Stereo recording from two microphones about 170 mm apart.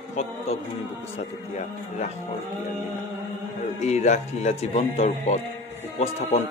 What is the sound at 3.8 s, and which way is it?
Speech, 40° left (ahead or behind).